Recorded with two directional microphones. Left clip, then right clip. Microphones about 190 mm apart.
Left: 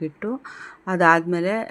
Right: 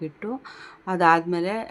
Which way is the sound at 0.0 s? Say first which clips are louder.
Left 3 dB; 15° left (ahead or behind).